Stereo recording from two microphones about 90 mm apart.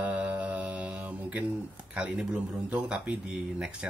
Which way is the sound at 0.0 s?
15° right (ahead or behind).